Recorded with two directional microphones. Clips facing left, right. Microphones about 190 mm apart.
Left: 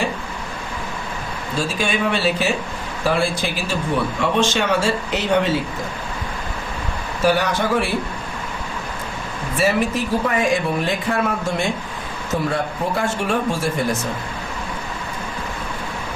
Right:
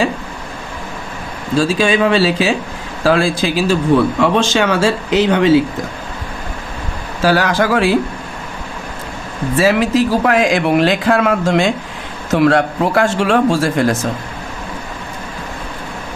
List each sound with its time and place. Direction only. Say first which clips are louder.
1.5 s speech: right 9 dB; 90° right
7.2 s speech: right 4 dB; 90° right
9.6 s speech: right 6 dB; 90° right